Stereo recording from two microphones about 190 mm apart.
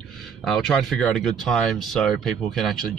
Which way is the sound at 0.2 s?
Centre (ahead or behind).